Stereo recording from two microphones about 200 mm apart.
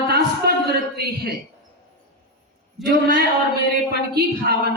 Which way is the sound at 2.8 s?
Centre (ahead or behind).